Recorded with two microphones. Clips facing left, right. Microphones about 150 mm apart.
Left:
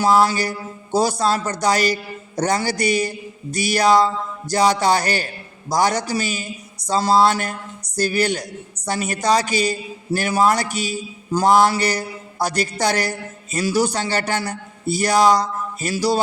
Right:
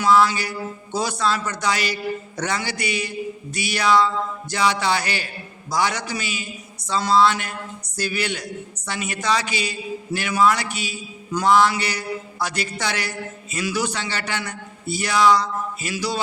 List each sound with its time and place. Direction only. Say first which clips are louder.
0.0 s a man's voice: left 1 dB; 35° left (ahead or behind)